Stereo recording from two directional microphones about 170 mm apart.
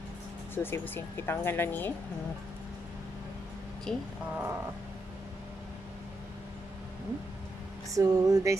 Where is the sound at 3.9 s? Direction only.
5° left (ahead or behind).